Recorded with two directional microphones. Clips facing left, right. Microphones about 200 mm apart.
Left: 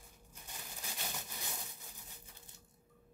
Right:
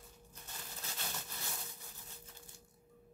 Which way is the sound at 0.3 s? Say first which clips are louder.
Left 1 dB; 15° left (ahead or behind).